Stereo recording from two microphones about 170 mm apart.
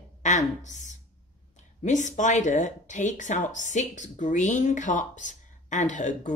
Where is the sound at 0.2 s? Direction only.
45° left (ahead or behind).